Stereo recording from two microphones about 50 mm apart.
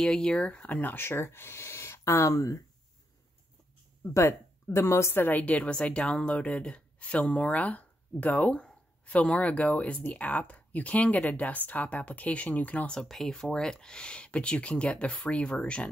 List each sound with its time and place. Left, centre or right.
0.0 s speech: centre; by 1.0 s left
1.0 s speech: left
4.1 s speech: left
4.7 s a woman's voice: left
5.1 s a woman's voice: left
5.4 s speech: left
13.0 s speech: centre; by 15.9 s left